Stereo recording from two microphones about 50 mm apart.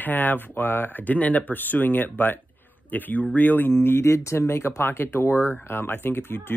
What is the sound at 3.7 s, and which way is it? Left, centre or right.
Speech, left.